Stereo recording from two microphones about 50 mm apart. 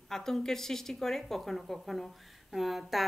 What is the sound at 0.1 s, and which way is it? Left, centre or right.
Speech, centre.